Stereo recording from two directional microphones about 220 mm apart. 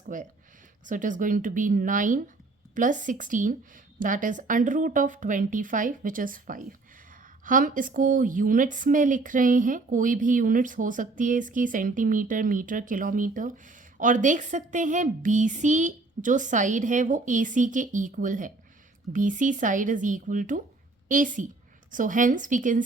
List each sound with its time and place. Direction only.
0.1 s speech: 35° right (ahead or behind)